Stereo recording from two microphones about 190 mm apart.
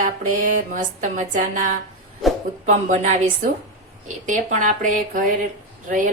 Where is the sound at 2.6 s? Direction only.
40° right (ahead or behind).